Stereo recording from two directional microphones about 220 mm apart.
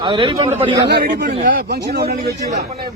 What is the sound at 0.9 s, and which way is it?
Speech, 45° right (ahead or behind).